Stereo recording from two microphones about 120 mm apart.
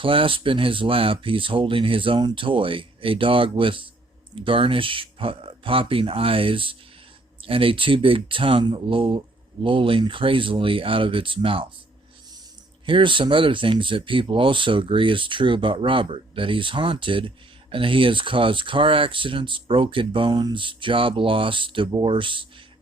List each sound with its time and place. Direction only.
0.0 s speech: 45° right (ahead or behind)
12.8 s speech: 45° right (ahead or behind)